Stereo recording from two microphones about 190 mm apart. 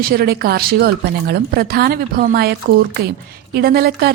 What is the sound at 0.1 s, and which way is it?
A woman's voice, 55° right (ahead or behind).